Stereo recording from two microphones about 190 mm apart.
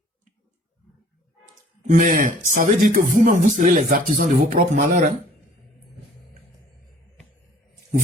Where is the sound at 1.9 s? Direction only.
40° right (ahead or behind).